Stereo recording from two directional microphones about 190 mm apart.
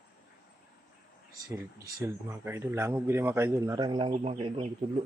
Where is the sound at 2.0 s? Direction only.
10° right (ahead or behind); by 4.6 s 30° right (ahead or behind).